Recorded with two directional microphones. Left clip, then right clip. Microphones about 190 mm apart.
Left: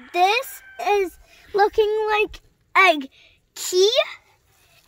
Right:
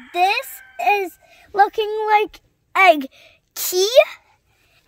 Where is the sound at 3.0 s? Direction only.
45° right (ahead or behind).